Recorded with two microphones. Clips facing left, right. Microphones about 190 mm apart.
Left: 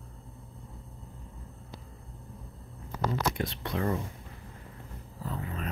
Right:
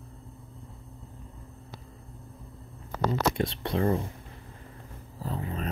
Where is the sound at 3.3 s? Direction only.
25° right (ahead or behind).